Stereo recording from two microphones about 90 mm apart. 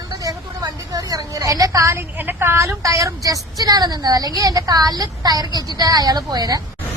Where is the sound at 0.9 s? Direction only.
40° right (ahead or behind).